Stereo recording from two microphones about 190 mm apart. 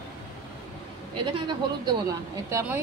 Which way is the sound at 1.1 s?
25° right (ahead or behind).